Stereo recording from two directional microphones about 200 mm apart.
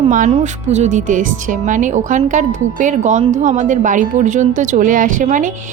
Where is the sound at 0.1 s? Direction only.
40° right (ahead or behind).